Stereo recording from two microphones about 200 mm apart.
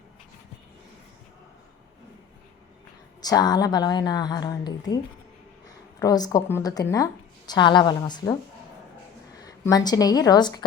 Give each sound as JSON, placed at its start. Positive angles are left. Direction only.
{"t": 3.2, "sound": "a woman's voice", "side_deg": 20}
{"t": 9.4, "sound": "a woman's voice", "side_deg": 20}